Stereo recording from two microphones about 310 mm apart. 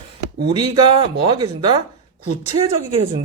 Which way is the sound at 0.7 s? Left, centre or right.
Centre.